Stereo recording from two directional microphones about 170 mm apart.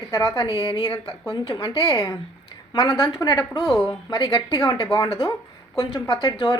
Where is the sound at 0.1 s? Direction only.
15° left (ahead or behind).